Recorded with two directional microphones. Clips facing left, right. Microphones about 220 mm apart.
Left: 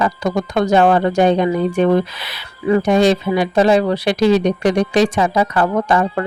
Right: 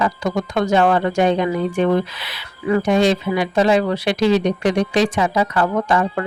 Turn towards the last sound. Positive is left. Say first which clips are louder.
# left 2 dB
turn(degrees=40)  # may be behind; listen again after turning